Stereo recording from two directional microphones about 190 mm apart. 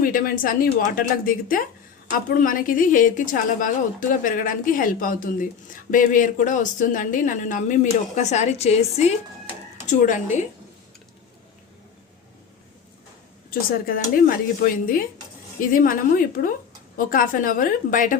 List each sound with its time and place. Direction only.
0.0 s a woman's voice: 45° left (ahead or behind)
13.5 s a woman's voice: 50° left (ahead or behind)